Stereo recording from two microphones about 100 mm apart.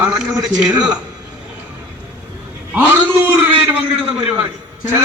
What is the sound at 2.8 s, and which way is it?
A man's voice, 15° right (ahead or behind).